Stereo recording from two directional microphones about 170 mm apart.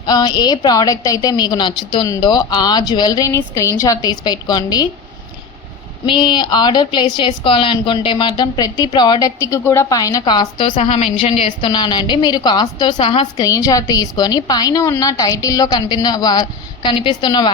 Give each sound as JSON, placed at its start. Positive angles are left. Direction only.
{"t": 0.0, "sound": "a woman's voice", "side_deg": 25}
{"t": 6.1, "sound": "a woman's voice", "side_deg": 25}
{"t": 10.8, "sound": "a woman's voice", "side_deg": 35}
{"t": 13.3, "sound": "a woman's voice", "side_deg": 20}